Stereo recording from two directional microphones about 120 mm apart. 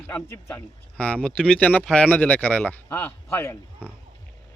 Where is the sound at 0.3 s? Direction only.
20° left (ahead or behind).